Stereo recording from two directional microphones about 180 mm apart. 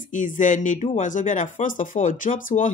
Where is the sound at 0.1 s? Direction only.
45° left (ahead or behind).